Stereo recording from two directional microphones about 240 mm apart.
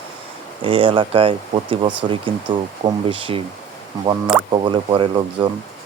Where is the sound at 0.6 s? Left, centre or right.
Right.